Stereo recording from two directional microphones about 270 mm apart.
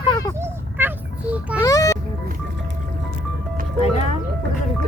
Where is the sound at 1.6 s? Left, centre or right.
Centre.